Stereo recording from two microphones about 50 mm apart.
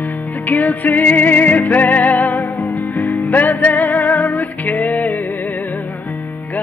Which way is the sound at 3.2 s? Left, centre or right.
Left.